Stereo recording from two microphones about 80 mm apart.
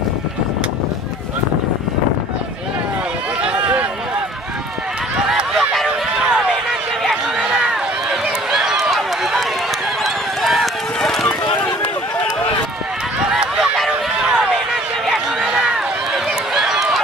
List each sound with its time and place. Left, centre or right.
3.4 s run: centre
5.2 s a sound: centre
6.2 s run: centre
13.3 s run: centre